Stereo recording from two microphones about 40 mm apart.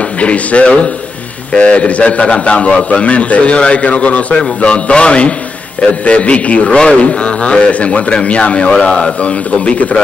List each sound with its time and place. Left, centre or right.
0.2 s a man's voice: left